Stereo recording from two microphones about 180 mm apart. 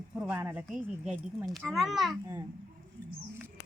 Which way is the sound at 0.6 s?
Centre (ahead or behind).